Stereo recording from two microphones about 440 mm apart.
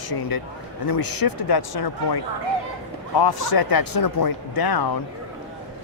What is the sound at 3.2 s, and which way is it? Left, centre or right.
Speech, left.